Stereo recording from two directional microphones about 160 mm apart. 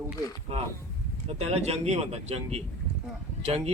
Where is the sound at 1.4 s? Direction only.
40° right (ahead or behind).